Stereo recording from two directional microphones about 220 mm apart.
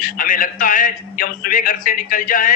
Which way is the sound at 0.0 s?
40° left (ahead or behind).